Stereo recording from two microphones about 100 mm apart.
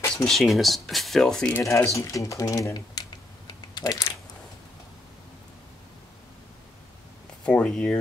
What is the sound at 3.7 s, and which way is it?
Typing, 45° left (ahead or behind).